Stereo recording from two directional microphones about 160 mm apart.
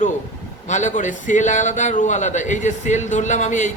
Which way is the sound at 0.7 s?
50° left (ahead or behind).